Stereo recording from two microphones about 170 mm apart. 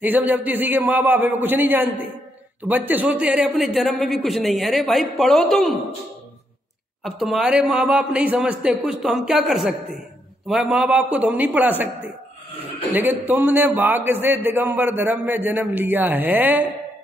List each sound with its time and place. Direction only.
0.0 s a man's voice: 10° right (ahead or behind)
7.0 s a man's voice: centre (ahead or behind)
12.9 s a man's voice: 10° right (ahead or behind)